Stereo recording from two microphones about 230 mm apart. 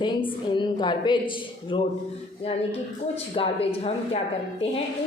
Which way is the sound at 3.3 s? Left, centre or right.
Left.